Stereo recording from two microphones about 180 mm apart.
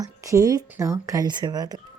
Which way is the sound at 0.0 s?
20° right (ahead or behind).